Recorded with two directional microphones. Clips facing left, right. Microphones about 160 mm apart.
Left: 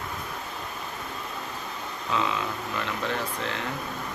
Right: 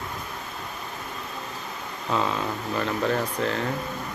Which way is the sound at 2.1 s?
45° right (ahead or behind).